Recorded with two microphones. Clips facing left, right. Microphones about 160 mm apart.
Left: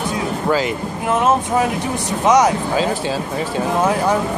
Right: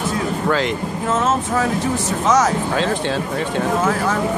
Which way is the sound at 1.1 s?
15° left (ahead or behind).